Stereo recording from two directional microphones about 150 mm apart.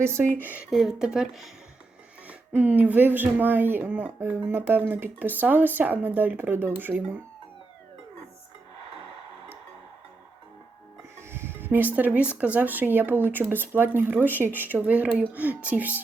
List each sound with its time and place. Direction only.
0.0 s speech: 15° right (ahead or behind)
0.7 s speech: centre (ahead or behind)
11.2 s music: 15° right (ahead or behind)
11.9 s speech: 10° right (ahead or behind)